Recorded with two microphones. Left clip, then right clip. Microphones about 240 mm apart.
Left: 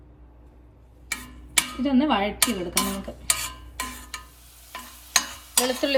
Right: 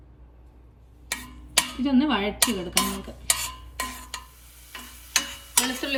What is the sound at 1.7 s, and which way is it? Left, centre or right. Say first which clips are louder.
Speech: left 3 dB; centre.